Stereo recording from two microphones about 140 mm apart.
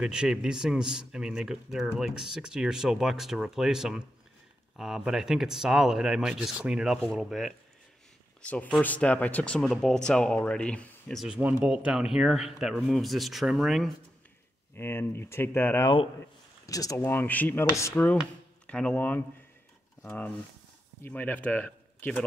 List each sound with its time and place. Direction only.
0.0 s speech: 5° right (ahead or behind)
8.4 s speech: 10° left (ahead or behind)
11.2 s speech: 5° right (ahead or behind)
14.8 s speech: 15° left (ahead or behind)
17.0 s speech: 15° left (ahead or behind)
18.7 s speech: 10° left (ahead or behind)